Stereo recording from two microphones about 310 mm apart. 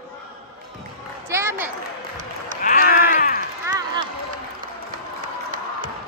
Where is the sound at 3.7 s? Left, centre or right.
Centre.